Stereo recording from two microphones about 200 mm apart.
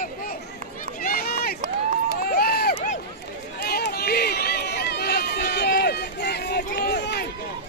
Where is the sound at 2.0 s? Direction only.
50° left (ahead or behind).